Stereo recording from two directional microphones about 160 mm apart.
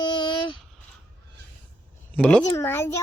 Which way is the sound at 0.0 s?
30° left (ahead or behind).